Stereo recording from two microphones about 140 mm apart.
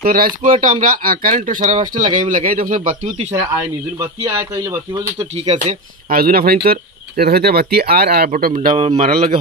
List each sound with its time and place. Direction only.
0.0 s speech: 90° right; by 3.0 s 75° right (ahead or behind)
4.0 s speech: 20° right (ahead or behind)
5.5 s speech: 75° right (ahead or behind); by 8.5 s 90° right
8.5 s speech: 50° right (ahead or behind)